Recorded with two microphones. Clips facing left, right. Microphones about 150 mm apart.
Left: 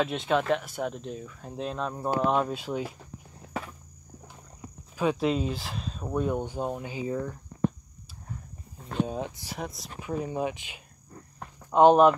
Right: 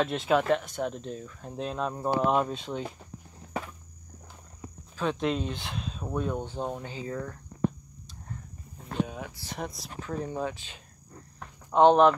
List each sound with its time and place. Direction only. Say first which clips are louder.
0.0 s speech: right 1 dB; centre (ahead or behind)
4.9 s speech: left 3 dB; 10° left (ahead or behind)
9.0 s speech: left 8 dB; 25° left (ahead or behind)
9.5 s speech: even; centre (ahead or behind)
9.9 s speech: left 2 dB; 10° left (ahead or behind)
11.3 s a sound: left 1 dB; 10° left (ahead or behind)